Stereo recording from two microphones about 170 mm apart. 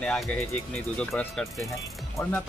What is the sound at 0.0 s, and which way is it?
Speech, 5° left (ahead or behind).